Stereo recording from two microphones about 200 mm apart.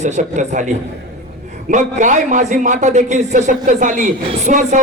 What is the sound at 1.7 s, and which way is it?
A man's voice, 40° right (ahead or behind).